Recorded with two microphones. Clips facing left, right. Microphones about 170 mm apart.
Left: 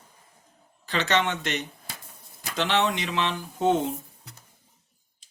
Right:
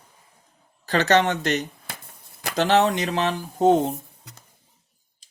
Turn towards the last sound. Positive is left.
turn(degrees=-40)  # may be behind; listen again after turning